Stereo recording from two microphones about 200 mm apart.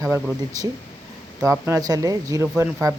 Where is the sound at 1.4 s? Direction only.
15° right (ahead or behind).